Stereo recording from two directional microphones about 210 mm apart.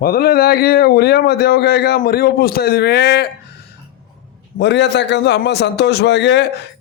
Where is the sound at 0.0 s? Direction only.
45° left (ahead or behind).